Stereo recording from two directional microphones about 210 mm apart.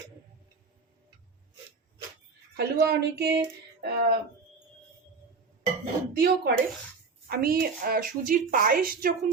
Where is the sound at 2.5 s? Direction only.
50° right (ahead or behind).